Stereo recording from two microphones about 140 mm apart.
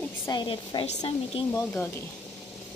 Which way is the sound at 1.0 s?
30° left (ahead or behind).